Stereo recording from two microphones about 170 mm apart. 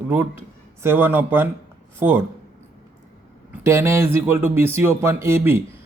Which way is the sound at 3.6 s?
15° right (ahead or behind).